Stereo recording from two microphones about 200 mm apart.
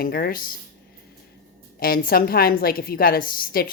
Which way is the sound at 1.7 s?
45° left (ahead or behind).